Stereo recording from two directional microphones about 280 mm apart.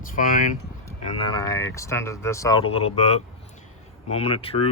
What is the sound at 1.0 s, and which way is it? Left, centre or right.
Speech, centre.